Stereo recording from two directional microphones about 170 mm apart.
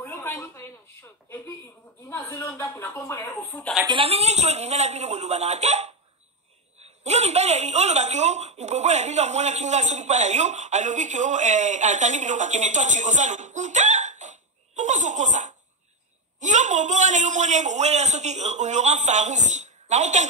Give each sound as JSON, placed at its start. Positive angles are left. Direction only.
{"t": 0.0, "sound": "a sound", "side_deg": 15}
{"t": 2.0, "sound": "speech", "side_deg": 15}
{"t": 3.8, "sound": "a woman's voice", "side_deg": -30}